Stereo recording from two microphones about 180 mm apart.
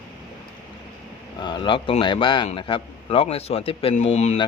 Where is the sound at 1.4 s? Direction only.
25° left (ahead or behind).